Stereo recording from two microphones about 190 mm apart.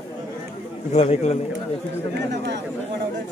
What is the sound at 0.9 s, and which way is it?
Speech, 35° left (ahead or behind).